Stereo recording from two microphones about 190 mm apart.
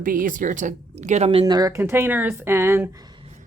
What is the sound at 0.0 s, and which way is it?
Speech, 45° right (ahead or behind).